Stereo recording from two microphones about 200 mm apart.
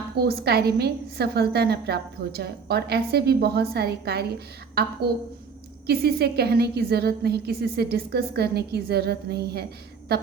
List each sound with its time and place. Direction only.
0.3 s a woman's voice: 50° right (ahead or behind)